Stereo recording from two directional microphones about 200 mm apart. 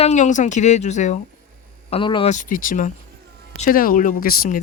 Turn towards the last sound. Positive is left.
turn(degrees=45)  # may be behind; listen again after turning